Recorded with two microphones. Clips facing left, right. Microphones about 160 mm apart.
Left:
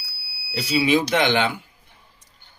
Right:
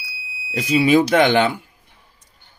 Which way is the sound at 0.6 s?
50° right (ahead or behind).